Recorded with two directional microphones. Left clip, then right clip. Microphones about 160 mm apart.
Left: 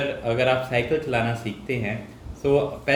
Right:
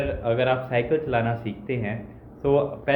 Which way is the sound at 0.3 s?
20° left (ahead or behind).